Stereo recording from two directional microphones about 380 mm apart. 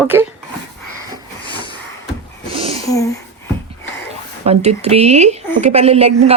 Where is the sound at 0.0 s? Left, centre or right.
Centre.